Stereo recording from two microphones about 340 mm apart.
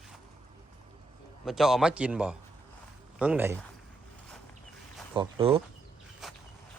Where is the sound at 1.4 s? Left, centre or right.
Centre.